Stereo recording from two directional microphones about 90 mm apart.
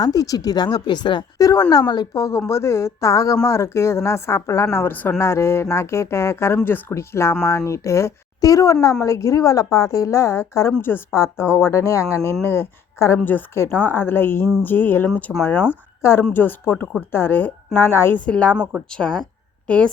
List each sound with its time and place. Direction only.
0.0 s speech: 45° left (ahead or behind); by 1.2 s 60° left (ahead or behind)
1.4 s a woman's voice: 40° left (ahead or behind); by 18.2 s 25° left (ahead or behind)
18.3 s speech: 15° left (ahead or behind)
18.5 s speech: 10° right (ahead or behind)
18.9 s speech: 10° left (ahead or behind)